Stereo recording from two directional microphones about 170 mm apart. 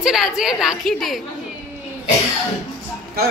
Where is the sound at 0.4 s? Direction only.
5° right (ahead or behind).